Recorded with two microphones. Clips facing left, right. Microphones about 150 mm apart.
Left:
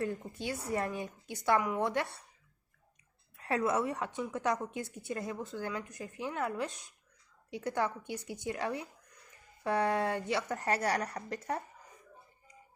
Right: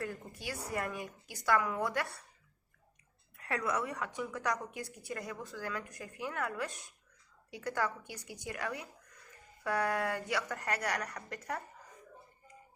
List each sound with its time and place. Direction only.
0.0 s a woman's voice: 25° left (ahead or behind)
3.3 s a woman's voice: 25° left (ahead or behind)